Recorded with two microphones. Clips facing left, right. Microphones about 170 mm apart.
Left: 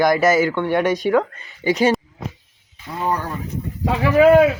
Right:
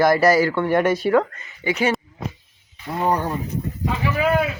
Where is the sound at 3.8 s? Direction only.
70° left (ahead or behind).